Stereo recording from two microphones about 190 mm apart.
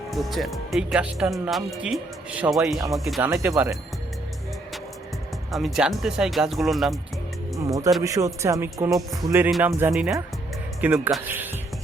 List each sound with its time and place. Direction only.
0.1 s speech: centre (ahead or behind)
5.5 s speech: centre (ahead or behind)
7.6 s speech: 15° right (ahead or behind)